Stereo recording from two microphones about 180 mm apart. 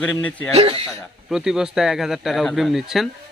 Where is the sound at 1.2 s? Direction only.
5° right (ahead or behind).